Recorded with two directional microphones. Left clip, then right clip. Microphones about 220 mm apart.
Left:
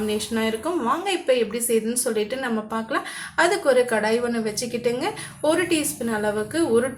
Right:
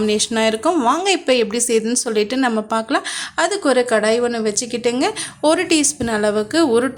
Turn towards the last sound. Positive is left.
turn(degrees=-50)  # may be behind; listen again after turning